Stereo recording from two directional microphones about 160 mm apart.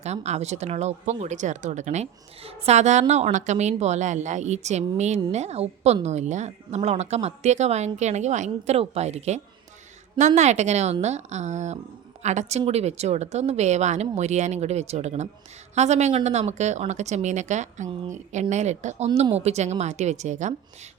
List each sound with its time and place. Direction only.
0.0 s speech: 45° right (ahead or behind)